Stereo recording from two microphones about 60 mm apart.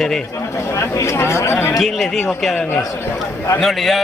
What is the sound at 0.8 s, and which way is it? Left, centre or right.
Speech, left.